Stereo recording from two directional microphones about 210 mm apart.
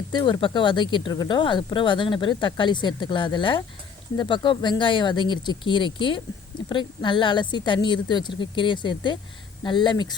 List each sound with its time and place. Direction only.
0.1 s speech: 20° left (ahead or behind)